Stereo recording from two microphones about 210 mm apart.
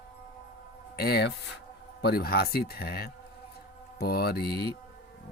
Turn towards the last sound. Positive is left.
turn(degrees=50)  # may be behind; listen again after turning